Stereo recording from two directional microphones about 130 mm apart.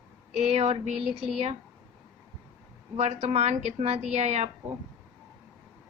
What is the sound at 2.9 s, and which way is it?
A woman's voice, 60° right (ahead or behind).